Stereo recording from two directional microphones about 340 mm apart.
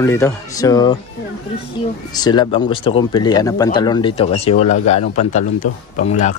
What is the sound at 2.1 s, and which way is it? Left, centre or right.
Speech, centre.